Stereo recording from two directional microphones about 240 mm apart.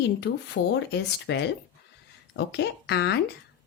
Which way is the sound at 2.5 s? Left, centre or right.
Left.